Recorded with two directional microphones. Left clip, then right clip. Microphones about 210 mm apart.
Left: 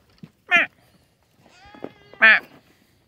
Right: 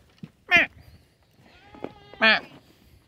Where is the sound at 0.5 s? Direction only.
25° right (ahead or behind).